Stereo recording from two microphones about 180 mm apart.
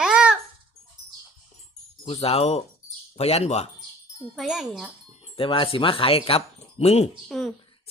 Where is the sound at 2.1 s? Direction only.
30° left (ahead or behind).